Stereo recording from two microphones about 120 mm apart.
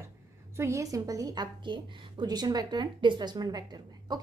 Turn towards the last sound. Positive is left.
turn(degrees=-35)  # may be behind; listen again after turning